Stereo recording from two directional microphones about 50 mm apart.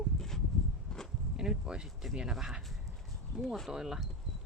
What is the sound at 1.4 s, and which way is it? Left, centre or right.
Speech, centre.